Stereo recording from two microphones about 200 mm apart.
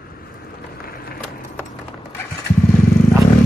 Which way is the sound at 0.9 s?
50° left (ahead or behind).